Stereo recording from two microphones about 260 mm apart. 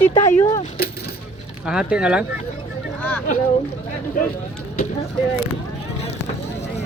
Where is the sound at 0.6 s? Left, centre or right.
Left.